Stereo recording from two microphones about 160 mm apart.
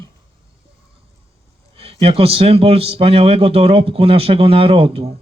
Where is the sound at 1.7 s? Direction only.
35° right (ahead or behind).